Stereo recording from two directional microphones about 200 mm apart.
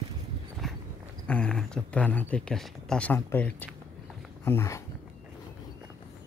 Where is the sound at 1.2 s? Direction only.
5° left (ahead or behind).